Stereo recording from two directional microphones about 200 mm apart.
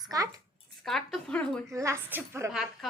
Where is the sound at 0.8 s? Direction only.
Centre (ahead or behind).